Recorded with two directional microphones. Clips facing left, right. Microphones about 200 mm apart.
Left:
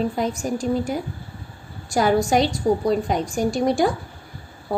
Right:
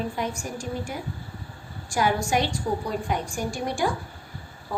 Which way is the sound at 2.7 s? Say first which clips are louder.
Left 8 dB; 45° left (ahead or behind).